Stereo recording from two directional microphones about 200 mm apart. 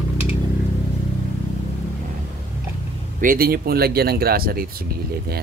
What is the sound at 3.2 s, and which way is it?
Speech, 45° right (ahead or behind).